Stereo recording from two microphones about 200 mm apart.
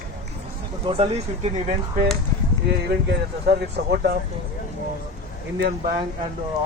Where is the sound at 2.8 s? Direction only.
55° right (ahead or behind).